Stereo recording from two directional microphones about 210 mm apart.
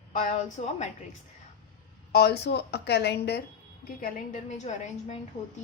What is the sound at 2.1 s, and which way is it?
A woman's voice, 50° left (ahead or behind).